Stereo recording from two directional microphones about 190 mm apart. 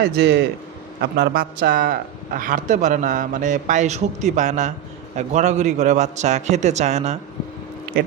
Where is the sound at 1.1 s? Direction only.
55° right (ahead or behind); by 7.2 s 35° right (ahead or behind).